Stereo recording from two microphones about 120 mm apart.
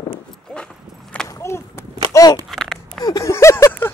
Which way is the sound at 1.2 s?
25° left (ahead or behind).